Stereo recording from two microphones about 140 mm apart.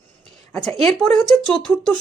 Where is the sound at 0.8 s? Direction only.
Centre (ahead or behind).